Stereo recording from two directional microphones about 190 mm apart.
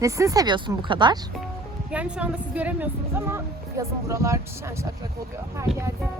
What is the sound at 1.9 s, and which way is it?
Speech, 5° right (ahead or behind).